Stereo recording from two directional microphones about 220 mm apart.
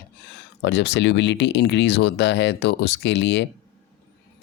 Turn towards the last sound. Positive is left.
turn(degrees=55)  # may be behind; listen again after turning